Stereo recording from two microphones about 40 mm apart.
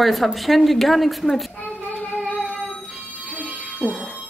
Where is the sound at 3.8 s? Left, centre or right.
Left.